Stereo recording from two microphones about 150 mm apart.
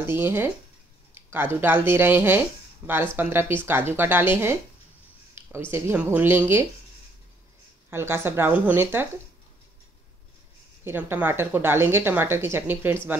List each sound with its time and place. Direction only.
0.0 s speech: 15° right (ahead or behind)
5.7 s speech: 15° right (ahead or behind)
7.9 s speech: 15° right (ahead or behind)
10.8 s speech: 15° right (ahead or behind)